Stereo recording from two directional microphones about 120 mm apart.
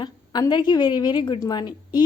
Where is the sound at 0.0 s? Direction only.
35° left (ahead or behind).